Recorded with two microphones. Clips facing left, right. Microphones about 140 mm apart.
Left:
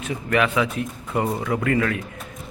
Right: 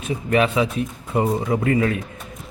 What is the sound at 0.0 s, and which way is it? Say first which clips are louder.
Speech: right 2 dB; 25° right (ahead or behind).